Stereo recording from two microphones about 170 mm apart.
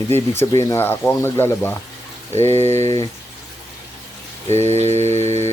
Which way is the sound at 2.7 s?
40° right (ahead or behind).